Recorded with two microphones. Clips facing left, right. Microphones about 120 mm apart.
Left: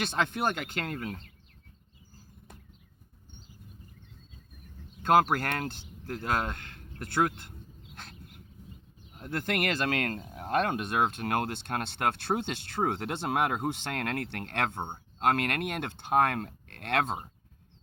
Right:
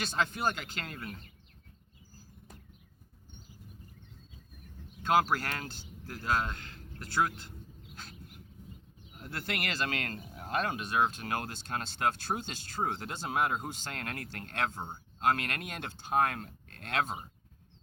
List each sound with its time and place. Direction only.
0.0 s speech: 55° left (ahead or behind)
5.0 s speech: 50° left (ahead or behind)
9.1 s speech: 50° left (ahead or behind)
14.8 s speech: 30° left (ahead or behind)
15.2 s speech: 55° left (ahead or behind)